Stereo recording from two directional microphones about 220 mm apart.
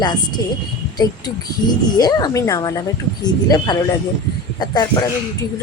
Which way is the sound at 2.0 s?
20° left (ahead or behind).